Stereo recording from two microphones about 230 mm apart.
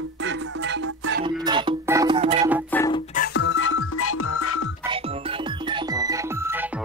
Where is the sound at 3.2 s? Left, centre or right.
Left.